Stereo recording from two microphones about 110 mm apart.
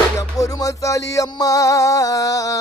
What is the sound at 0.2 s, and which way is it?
Music, 30° left (ahead or behind).